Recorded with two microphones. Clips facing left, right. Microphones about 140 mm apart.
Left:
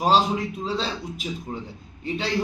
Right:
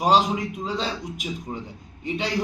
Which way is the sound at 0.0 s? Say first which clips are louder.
Even; 15° right (ahead or behind).